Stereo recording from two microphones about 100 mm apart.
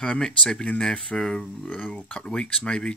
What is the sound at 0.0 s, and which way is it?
Speech, 5° left (ahead or behind).